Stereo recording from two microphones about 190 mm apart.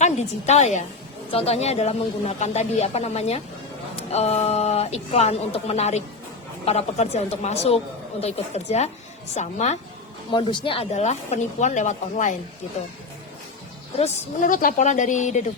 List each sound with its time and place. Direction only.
0.0 s speech: 35° left (ahead or behind)
10.3 s speech: 25° left (ahead or behind)
14.0 s speech: 45° left (ahead or behind)